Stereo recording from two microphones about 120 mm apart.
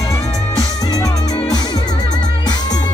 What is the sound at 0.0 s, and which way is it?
Music, 30° left (ahead or behind).